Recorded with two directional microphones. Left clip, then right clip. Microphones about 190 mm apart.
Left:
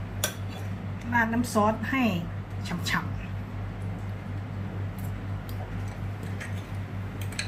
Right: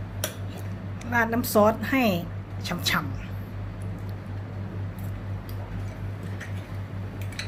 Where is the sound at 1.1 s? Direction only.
65° right (ahead or behind).